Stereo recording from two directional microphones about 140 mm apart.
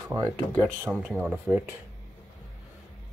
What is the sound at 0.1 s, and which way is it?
Speech, 15° right (ahead or behind).